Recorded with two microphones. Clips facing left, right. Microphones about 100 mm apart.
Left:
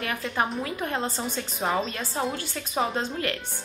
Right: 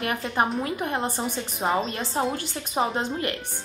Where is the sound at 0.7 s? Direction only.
20° right (ahead or behind).